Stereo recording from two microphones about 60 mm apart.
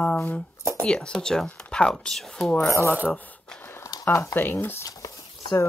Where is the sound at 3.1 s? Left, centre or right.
Left.